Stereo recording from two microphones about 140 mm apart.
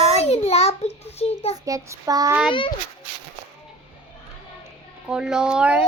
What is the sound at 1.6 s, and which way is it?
Child singing, 25° right (ahead or behind).